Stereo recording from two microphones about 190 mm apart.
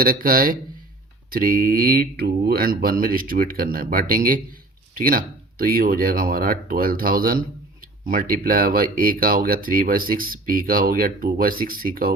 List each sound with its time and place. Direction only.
0.0 s speech: 50° right (ahead or behind)